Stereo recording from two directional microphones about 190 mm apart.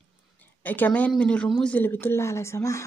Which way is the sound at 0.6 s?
10° left (ahead or behind).